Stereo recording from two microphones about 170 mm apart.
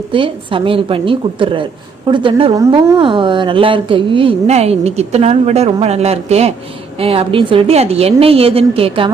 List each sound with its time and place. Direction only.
0.1 s a woman's voice: 30° right (ahead or behind)